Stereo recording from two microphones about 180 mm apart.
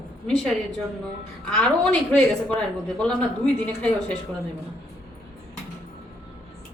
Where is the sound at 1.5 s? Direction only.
5° left (ahead or behind).